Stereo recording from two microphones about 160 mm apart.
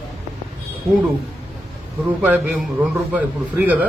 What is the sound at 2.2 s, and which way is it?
A man's voice, 5° right (ahead or behind).